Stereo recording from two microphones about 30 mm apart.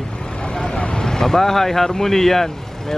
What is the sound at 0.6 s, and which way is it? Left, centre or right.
Speech, left.